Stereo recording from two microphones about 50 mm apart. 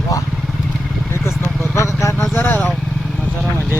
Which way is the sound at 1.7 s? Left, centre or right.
Left.